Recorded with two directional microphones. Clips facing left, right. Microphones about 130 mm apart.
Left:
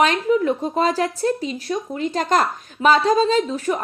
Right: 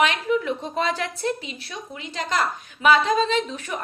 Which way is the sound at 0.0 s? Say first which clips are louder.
Left 4 dB; 40° left (ahead or behind).